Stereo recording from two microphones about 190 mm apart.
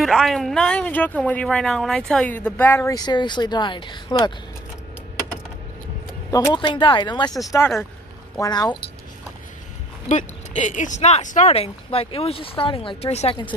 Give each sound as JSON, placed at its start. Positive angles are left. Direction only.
{"t": 0.0, "sound": "speech", "side_deg": 0}
{"t": 6.3, "sound": "speech", "side_deg": 20}
{"t": 10.0, "sound": "speech", "side_deg": 40}